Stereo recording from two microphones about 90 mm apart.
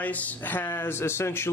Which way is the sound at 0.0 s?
20° left (ahead or behind).